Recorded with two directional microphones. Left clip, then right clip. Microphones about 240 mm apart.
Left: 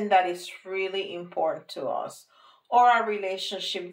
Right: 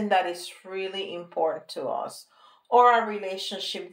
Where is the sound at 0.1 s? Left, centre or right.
Right.